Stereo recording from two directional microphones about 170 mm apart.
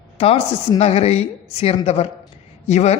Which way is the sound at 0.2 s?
35° left (ahead or behind).